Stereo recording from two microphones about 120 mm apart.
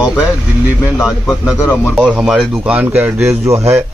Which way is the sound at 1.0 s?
5° right (ahead or behind).